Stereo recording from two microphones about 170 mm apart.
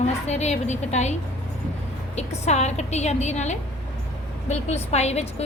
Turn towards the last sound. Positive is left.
turn(degrees=40)  # may be behind; listen again after turning